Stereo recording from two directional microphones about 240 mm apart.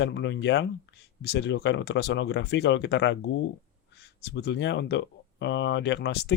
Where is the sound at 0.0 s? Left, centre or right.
Left.